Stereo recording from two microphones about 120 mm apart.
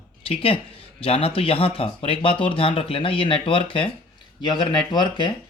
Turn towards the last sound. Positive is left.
turn(degrees=40)  # may be behind; listen again after turning